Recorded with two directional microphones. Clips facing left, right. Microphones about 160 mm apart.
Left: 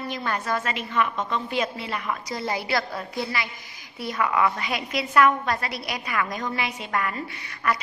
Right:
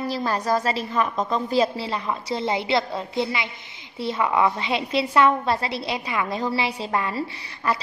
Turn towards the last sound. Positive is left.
turn(degrees=-30)  # may be behind; listen again after turning